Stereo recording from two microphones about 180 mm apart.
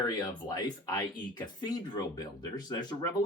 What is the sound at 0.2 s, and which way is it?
Speech, 20° left (ahead or behind).